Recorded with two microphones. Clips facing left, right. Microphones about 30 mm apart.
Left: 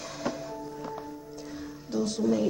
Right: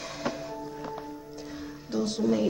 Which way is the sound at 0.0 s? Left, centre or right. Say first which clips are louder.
Even; centre.